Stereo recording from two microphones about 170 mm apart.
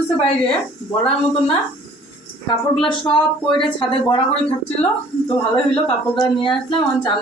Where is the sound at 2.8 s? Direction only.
30° left (ahead or behind).